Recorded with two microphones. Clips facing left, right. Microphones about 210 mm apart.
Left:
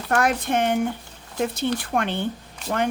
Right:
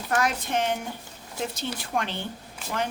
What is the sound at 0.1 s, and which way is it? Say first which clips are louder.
Speech: left 5 dB; 55° left (ahead or behind).